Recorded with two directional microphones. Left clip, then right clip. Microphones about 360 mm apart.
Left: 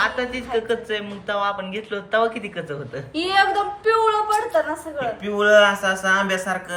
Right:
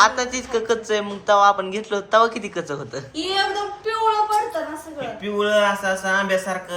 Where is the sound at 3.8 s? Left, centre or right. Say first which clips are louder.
Left 1 dB; left.